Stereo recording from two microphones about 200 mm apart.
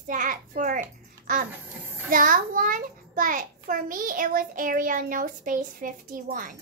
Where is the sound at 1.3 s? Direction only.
40° right (ahead or behind).